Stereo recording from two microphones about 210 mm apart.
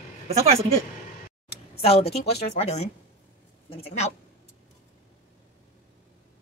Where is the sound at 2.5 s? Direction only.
30° left (ahead or behind).